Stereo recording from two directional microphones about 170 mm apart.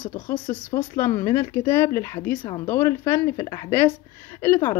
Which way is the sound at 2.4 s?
25° left (ahead or behind).